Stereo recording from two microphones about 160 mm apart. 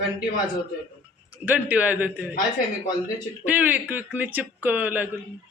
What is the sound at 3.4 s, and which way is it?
A man's voice, 10° right (ahead or behind).